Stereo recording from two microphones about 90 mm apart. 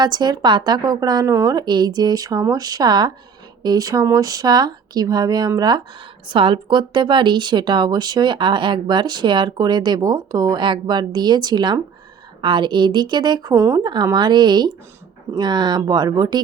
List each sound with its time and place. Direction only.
0.0 s speech: 50° right (ahead or behind)
1.3 s speech: 35° right (ahead or behind)
1.5 s speech: 50° right (ahead or behind)
6.2 s a woman's voice: 70° right (ahead or behind); by 10.6 s 45° right (ahead or behind)
10.6 s a woman's voice: 55° right (ahead or behind)
13.5 s speech: 35° right (ahead or behind)
13.8 s speech: 55° right (ahead or behind)